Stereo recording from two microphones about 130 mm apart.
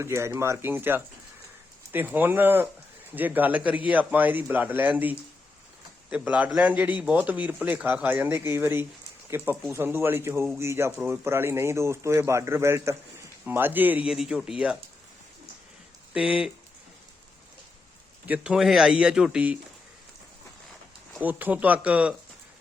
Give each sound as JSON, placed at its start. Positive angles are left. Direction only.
{"t": 0.0, "sound": "a man's voice", "side_deg": -20}
{"t": 16.1, "sound": "a man's voice", "side_deg": -5}
{"t": 18.3, "sound": "speech", "side_deg": -5}
{"t": 21.2, "sound": "a man's voice", "side_deg": -15}